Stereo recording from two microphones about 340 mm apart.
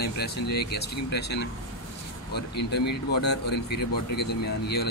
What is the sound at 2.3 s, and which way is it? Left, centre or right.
Speech, left.